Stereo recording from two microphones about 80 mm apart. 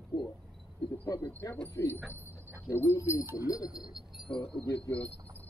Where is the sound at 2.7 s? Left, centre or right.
Left.